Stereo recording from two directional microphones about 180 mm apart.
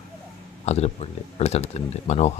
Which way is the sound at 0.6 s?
35° left (ahead or behind).